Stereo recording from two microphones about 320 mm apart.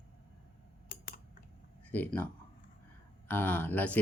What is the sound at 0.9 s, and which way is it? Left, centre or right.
Typing, left.